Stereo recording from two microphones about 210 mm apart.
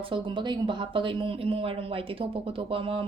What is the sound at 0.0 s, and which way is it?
Speech, 25° right (ahead or behind).